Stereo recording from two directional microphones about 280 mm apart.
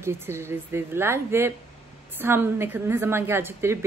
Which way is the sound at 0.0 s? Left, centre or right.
Centre.